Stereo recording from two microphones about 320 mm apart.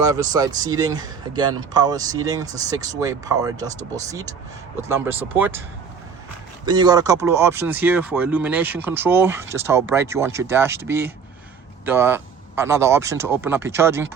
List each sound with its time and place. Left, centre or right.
0.0 s speech: centre
6.7 s speech: centre